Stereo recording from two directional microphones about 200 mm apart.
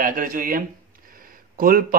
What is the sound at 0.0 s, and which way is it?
A man's voice, 45° right (ahead or behind).